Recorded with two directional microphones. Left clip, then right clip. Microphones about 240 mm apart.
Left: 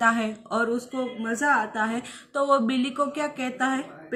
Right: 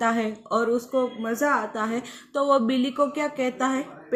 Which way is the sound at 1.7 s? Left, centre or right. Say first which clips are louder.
Left 1 dB; centre.